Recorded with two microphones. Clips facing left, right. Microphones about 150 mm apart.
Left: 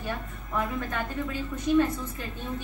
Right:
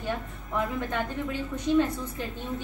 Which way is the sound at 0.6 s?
20° right (ahead or behind).